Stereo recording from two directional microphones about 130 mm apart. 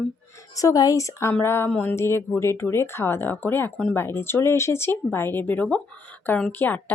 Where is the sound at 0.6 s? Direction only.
25° left (ahead or behind).